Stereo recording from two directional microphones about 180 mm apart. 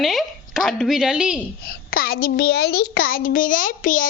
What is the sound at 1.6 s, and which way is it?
A child's voice, 55° left (ahead or behind).